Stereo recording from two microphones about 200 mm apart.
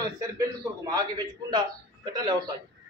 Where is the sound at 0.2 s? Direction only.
15° right (ahead or behind).